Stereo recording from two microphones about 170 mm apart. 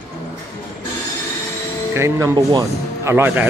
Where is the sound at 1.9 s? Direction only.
15° right (ahead or behind).